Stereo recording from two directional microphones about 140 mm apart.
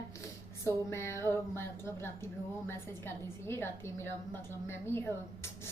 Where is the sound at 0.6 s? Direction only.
20° left (ahead or behind).